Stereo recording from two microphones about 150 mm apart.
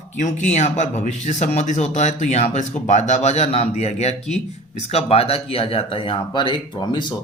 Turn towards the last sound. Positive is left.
turn(degrees=30)  # may be behind; listen again after turning